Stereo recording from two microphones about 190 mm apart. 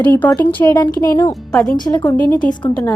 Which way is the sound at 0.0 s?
10° left (ahead or behind).